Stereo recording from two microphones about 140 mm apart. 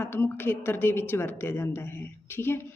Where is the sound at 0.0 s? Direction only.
15° left (ahead or behind).